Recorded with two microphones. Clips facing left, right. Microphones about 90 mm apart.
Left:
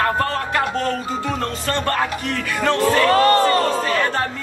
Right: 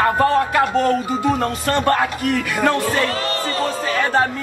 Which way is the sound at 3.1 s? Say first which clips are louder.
Left 9 dB; 55° left (ahead or behind).